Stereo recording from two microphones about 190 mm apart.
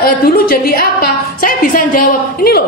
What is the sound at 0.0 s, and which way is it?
A woman's voice, 50° left (ahead or behind).